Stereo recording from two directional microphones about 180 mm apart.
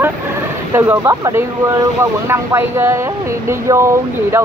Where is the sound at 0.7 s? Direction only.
15° right (ahead or behind).